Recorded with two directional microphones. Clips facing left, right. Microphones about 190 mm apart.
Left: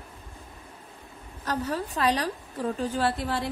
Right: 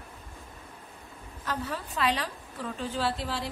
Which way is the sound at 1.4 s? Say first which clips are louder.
Left 5 dB; 40° left (ahead or behind).